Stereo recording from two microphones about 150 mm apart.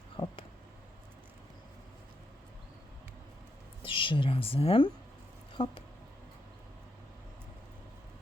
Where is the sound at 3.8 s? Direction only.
35° left (ahead or behind).